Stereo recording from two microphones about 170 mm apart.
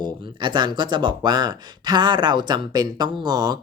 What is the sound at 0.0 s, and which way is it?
Speech, 25° right (ahead or behind).